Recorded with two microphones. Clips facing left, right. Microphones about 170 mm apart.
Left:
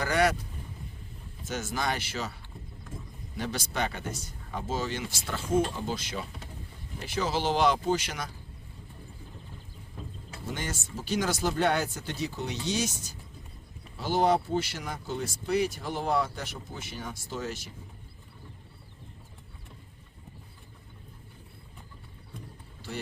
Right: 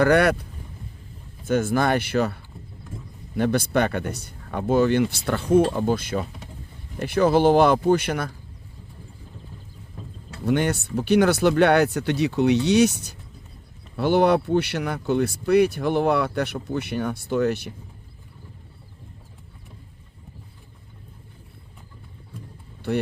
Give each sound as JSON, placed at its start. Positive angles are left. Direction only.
{"t": 0.0, "sound": "speech", "side_deg": -60}
{"t": 1.5, "sound": "speech", "side_deg": -55}
{"t": 10.4, "sound": "speech", "side_deg": -65}
{"t": 22.9, "sound": "speech", "side_deg": -65}